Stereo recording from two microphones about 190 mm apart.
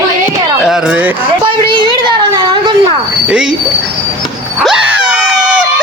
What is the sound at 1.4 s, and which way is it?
Speech, 25° right (ahead or behind).